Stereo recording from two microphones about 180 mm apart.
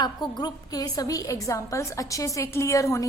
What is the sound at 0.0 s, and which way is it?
A woman's voice, 25° left (ahead or behind).